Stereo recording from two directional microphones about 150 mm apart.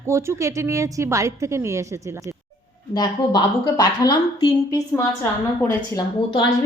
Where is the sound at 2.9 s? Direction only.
25° left (ahead or behind).